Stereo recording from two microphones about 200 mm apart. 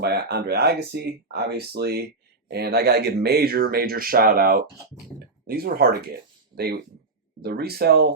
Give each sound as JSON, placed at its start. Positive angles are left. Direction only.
{"t": 0.0, "sound": "speech", "side_deg": -55}
{"t": 7.4, "sound": "speech", "side_deg": -50}